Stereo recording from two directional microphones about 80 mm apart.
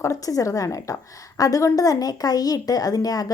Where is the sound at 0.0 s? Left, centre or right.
Left.